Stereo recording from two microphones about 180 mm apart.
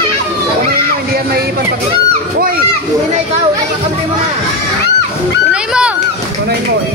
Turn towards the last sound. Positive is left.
turn(degrees=-5)  # may be behind; listen again after turning